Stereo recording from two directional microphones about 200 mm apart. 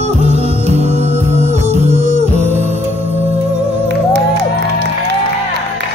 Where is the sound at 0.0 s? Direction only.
35° right (ahead or behind).